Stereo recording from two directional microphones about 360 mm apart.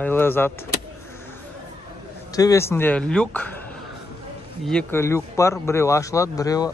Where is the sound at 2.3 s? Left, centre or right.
Centre.